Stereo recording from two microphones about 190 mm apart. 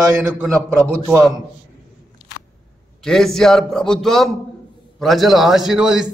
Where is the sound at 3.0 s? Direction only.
Centre (ahead or behind).